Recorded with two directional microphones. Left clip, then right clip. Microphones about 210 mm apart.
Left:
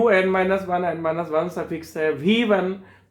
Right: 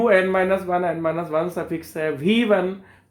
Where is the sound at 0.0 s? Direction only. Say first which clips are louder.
Right 1 dB; 30° right (ahead or behind).